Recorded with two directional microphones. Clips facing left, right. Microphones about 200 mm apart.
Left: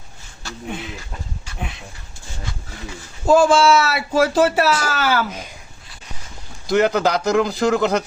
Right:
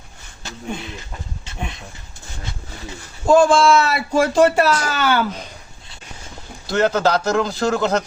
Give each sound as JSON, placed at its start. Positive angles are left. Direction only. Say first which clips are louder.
{"t": 0.4, "sound": "speech", "louder": "left 1 dB", "side_deg": -20}
{"t": 3.2, "sound": "speech", "louder": "even", "side_deg": 5}
{"t": 6.7, "sound": "a man's voice", "louder": "left 1 dB", "side_deg": 15}